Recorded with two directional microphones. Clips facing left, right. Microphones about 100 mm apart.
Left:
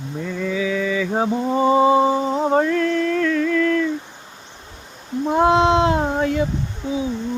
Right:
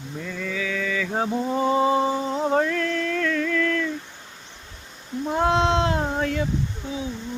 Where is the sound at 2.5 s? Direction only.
5° left (ahead or behind).